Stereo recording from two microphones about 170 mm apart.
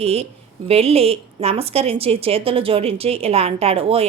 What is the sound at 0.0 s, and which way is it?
Speech, 35° right (ahead or behind).